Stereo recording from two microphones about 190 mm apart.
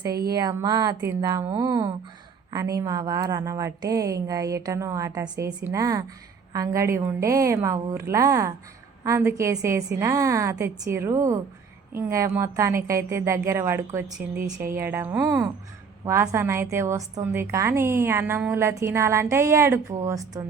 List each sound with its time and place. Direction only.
0.3 s a woman's voice: 20° right (ahead or behind)